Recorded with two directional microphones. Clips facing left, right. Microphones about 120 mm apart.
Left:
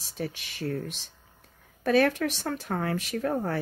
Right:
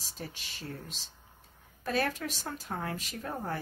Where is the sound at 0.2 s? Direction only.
65° left (ahead or behind).